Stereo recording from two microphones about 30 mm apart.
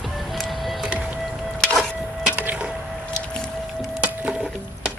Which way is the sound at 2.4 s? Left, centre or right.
Right.